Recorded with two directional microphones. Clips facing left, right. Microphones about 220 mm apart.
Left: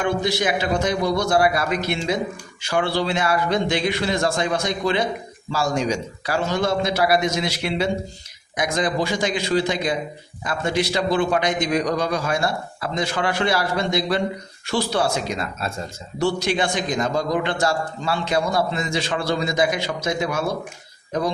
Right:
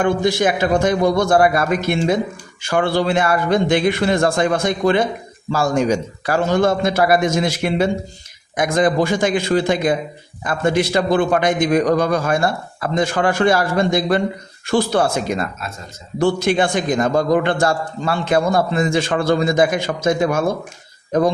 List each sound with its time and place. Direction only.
0.0 s a man's voice: 50° right (ahead or behind)